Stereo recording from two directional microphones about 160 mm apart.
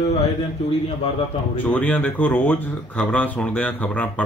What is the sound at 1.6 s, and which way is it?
Speech, 10° left (ahead or behind).